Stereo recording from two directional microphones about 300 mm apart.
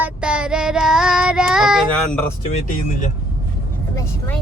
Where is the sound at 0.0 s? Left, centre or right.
Centre.